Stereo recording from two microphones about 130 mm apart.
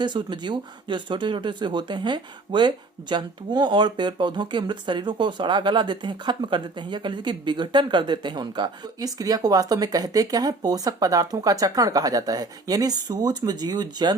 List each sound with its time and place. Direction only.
0.0 s speech: 35° right (ahead or behind)